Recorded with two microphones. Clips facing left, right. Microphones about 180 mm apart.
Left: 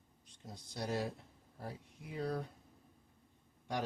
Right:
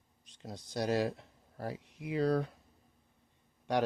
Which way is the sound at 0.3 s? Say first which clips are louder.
Right 6 dB; 85° right.